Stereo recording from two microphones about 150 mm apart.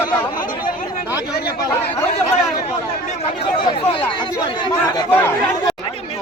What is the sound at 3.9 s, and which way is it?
Speech, 35° left (ahead or behind).